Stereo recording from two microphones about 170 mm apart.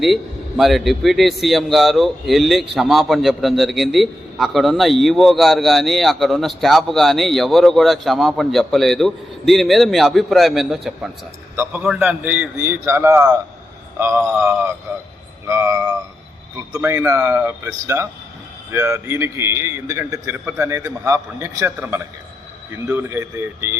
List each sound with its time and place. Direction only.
0.0 s a man's voice: centre (ahead or behind)
11.5 s a man's voice: 10° right (ahead or behind)